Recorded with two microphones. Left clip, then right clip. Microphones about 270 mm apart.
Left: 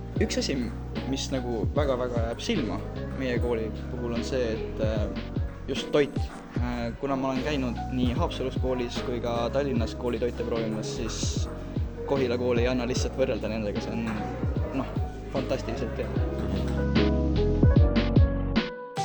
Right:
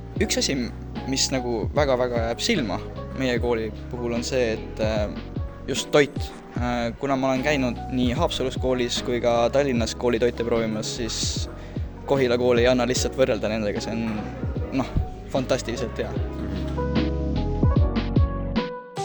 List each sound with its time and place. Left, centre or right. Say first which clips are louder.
0.2 s speech: right 4 dB; right
15.4 s speech: right 5 dB; right
16.6 s music: right 1 dB; centre